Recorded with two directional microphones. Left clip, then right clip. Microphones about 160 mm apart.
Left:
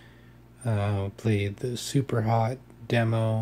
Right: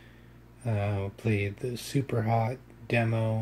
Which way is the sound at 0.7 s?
20° left (ahead or behind).